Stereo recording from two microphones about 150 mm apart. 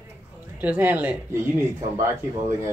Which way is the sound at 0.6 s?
10° right (ahead or behind).